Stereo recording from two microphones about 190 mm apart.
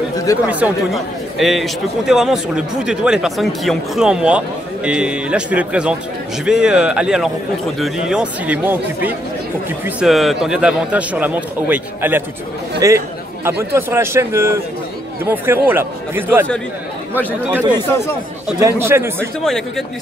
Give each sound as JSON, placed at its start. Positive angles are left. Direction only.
{"t": 0.5, "sound": "a man's voice", "side_deg": -5}
{"t": 18.6, "sound": "a man's voice", "side_deg": -15}
{"t": 19.1, "sound": "speech", "side_deg": 0}